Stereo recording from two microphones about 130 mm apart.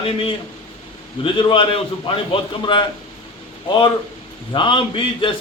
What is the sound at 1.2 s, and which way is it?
A man's voice, 40° left (ahead or behind).